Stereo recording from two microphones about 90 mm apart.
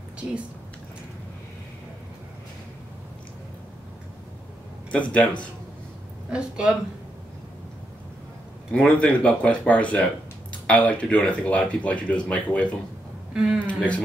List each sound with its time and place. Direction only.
4.9 s speech: 15° left (ahead or behind)
6.3 s a woman's voice: 10° right (ahead or behind)
8.7 s speech: 15° left (ahead or behind)
13.3 s speech: 5° right (ahead or behind)
13.7 s speech: 15° left (ahead or behind)